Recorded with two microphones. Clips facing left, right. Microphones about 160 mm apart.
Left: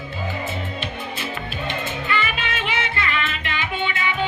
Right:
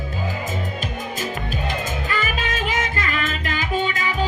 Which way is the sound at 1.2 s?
40° right (ahead or behind).